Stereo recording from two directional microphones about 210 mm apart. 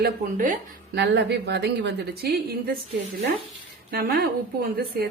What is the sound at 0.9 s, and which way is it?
A woman's voice, 55° right (ahead or behind).